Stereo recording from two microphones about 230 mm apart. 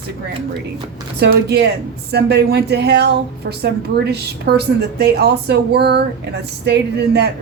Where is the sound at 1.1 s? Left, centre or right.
Right.